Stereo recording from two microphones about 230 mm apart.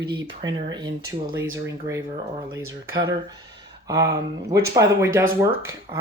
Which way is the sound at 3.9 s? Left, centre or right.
Centre.